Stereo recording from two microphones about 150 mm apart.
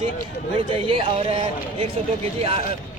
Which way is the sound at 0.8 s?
35° right (ahead or behind).